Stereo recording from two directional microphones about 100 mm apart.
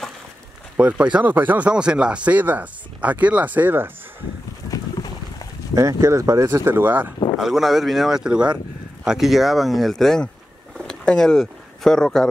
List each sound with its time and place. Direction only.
0.7 s speech: 10° right (ahead or behind)
4.6 s boat: 40° left (ahead or behind)
5.8 s speech: 35° right (ahead or behind); by 7.2 s 20° right (ahead or behind)
7.3 s speech: 5° right (ahead or behind)